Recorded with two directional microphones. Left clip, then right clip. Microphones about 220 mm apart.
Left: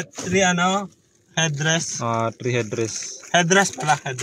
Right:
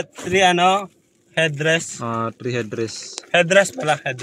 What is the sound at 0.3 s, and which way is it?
Speech, 50° right (ahead or behind).